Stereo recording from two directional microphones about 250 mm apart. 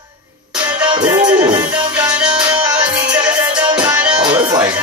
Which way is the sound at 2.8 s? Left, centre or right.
Centre.